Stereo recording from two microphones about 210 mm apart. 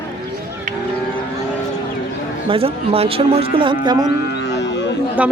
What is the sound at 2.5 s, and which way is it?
Speech, 25° right (ahead or behind).